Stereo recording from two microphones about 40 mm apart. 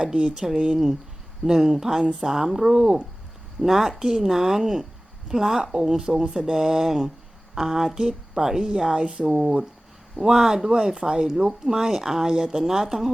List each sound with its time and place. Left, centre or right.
0.0 s speech: right
1.5 s speech: centre
2.7 s speech: right
3.6 s speech: centre; by 6.3 s right
6.3 s speech: centre
9.4 s speech: centre